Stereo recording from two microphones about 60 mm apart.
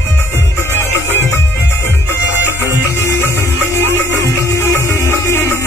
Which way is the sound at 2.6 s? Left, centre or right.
Left.